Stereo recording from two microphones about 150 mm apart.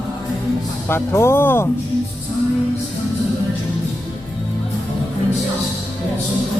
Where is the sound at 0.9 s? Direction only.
15° left (ahead or behind).